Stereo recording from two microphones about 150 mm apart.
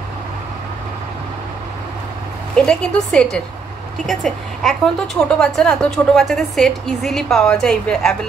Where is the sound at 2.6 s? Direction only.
5° left (ahead or behind).